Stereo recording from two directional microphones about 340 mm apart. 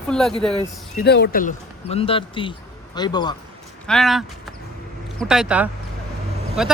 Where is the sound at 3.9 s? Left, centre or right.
Centre.